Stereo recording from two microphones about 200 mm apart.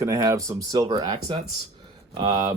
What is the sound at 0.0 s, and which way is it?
Speech, 15° right (ahead or behind).